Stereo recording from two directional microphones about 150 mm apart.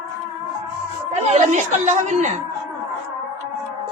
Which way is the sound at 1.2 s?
50° right (ahead or behind).